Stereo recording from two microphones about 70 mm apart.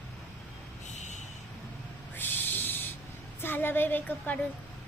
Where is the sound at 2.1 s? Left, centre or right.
Left.